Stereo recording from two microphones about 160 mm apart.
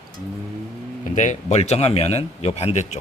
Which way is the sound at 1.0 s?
50° left (ahead or behind).